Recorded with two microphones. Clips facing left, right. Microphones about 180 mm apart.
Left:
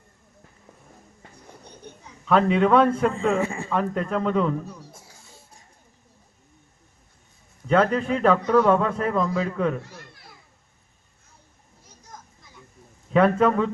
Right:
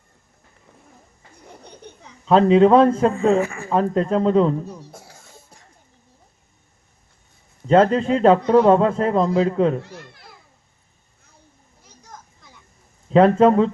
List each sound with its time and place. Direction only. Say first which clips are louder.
2.2 s speech: right 6 dB; 30° right (ahead or behind)
3.4 s speech: even; 30° left (ahead or behind)
3.7 s speech: right 6 dB; 30° right (ahead or behind)
4.9 s a sound: right 6 dB; 70° right (ahead or behind)
7.7 s a man's voice: right 5 dB; 30° right (ahead or behind)
13.1 s a man's voice: right 5 dB; 30° right (ahead or behind)